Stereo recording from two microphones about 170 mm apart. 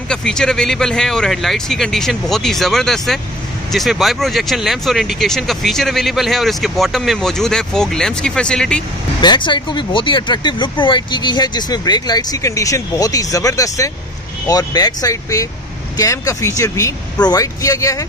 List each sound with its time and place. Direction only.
0.1 s speech: 5° left (ahead or behind)
9.2 s speech: 25° left (ahead or behind)